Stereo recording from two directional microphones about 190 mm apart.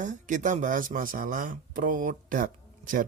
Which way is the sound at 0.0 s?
40° right (ahead or behind).